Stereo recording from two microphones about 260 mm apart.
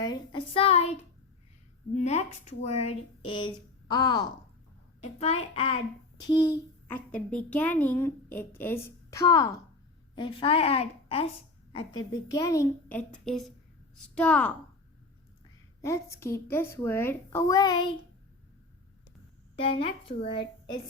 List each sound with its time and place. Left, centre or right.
0.0 s a sound: centre
2.0 s a woman's voice: left; by 14.5 s centre
15.8 s a woman's voice: centre
19.5 s speech: left